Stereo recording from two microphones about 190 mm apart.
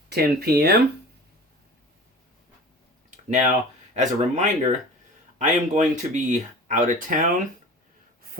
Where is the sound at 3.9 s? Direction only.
35° right (ahead or behind).